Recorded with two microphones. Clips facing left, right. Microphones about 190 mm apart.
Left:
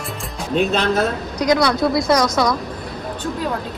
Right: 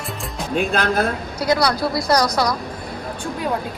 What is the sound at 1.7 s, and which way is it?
Speech, 20° left (ahead or behind).